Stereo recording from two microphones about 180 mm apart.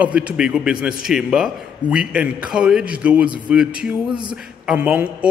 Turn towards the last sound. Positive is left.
turn(degrees=-5)  # may be behind; listen again after turning